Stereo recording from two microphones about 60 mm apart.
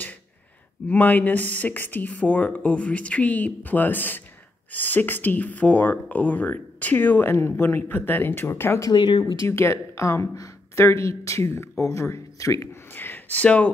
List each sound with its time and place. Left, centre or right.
0.8 s speech: left
10.3 s a sound: left
10.9 s speech: left
12.9 s speech: left